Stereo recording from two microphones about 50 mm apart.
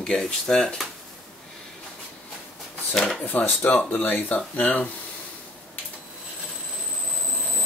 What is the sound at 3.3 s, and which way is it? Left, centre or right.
Speech, left.